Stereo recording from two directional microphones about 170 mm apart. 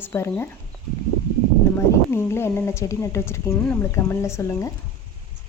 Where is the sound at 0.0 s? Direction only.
15° left (ahead or behind).